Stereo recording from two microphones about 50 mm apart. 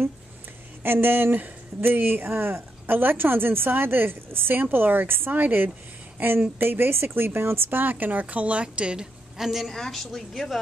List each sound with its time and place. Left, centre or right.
0.8 s speech: right
9.4 s speech: centre